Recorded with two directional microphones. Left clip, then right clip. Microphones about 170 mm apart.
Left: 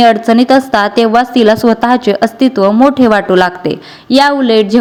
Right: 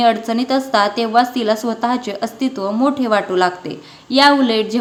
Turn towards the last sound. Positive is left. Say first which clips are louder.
# left 4 dB
turn(degrees=35)  # may be behind; listen again after turning